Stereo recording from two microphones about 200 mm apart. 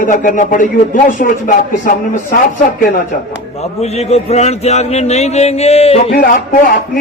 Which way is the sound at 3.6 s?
30° left (ahead or behind).